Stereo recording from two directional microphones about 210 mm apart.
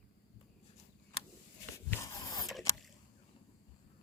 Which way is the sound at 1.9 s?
15° left (ahead or behind).